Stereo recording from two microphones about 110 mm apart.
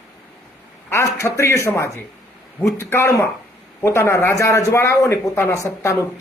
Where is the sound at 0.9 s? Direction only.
25° left (ahead or behind).